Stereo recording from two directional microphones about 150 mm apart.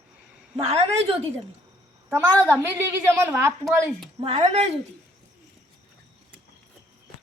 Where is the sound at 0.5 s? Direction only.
40° right (ahead or behind).